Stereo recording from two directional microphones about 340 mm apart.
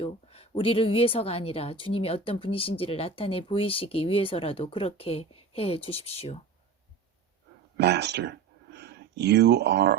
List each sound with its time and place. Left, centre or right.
0.0 s speech: centre
7.8 s speech: right